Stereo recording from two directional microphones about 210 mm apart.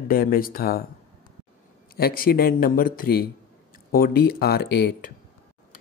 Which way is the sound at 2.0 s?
45° left (ahead or behind).